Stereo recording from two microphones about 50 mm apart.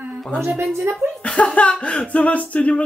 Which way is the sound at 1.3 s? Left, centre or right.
Centre.